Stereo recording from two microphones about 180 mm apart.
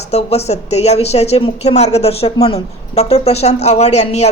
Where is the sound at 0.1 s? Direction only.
35° left (ahead or behind).